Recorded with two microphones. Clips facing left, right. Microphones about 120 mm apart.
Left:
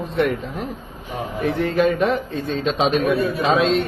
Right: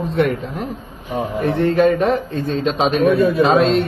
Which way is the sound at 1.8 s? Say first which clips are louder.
Right 3 dB; 40° right (ahead or behind).